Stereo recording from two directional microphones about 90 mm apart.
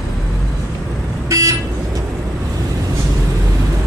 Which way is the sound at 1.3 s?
35° right (ahead or behind).